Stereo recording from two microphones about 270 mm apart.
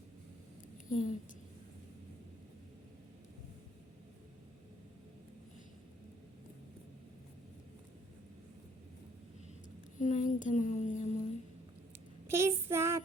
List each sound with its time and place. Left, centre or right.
0.9 s speech: left
10.0 s child singing: left
12.3 s child singing: centre